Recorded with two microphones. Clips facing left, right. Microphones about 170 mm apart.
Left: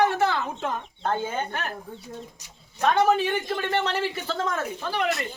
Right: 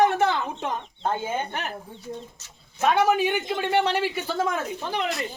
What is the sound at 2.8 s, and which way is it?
Speech, 10° right (ahead or behind).